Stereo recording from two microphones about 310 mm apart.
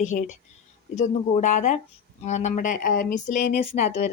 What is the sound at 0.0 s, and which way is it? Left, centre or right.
Speech, left.